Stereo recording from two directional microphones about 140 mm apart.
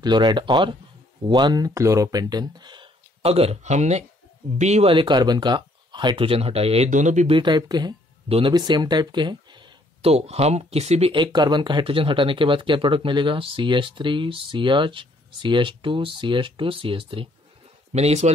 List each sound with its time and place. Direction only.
0.0 s a man's voice: 30° right (ahead or behind); by 4.9 s 50° right (ahead or behind)
4.9 s speech: 30° right (ahead or behind)
6.9 s speech: 60° right (ahead or behind)
7.2 s speech: 35° right (ahead or behind)
8.3 s a man's voice: 45° right (ahead or behind)
8.5 s a sound: 30° right (ahead or behind)
10.1 s speech: 50° right (ahead or behind)
17.9 s a man's voice: 50° right (ahead or behind)